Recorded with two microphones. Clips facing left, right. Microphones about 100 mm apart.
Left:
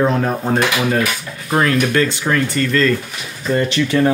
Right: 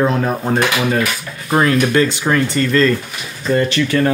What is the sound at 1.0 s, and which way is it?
Speech, 20° right (ahead or behind).